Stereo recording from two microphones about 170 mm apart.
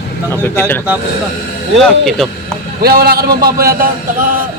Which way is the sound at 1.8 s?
Centre (ahead or behind).